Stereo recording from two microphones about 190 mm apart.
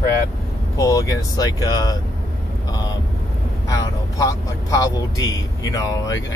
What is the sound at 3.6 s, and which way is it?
Speech, 20° left (ahead or behind).